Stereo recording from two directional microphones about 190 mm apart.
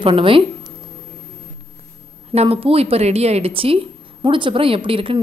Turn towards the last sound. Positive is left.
turn(degrees=-30)  # may be behind; listen again after turning